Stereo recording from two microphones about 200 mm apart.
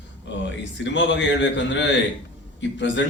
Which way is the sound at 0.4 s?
65° left (ahead or behind).